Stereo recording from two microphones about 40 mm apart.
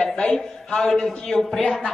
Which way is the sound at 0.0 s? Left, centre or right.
Left.